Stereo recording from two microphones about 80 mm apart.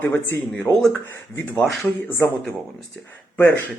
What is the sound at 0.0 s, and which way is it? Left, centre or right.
Speech, left.